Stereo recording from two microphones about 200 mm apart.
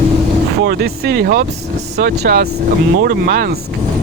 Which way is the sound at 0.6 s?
55° right (ahead or behind).